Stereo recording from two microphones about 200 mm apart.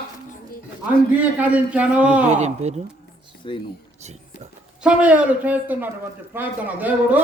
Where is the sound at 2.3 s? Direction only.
35° right (ahead or behind).